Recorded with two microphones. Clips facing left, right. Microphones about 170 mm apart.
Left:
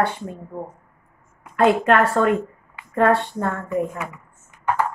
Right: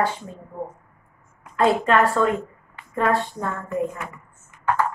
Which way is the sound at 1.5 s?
60° left (ahead or behind).